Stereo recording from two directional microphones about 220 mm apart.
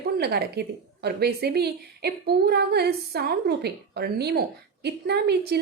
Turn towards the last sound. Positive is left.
turn(degrees=-45)  # may be behind; listen again after turning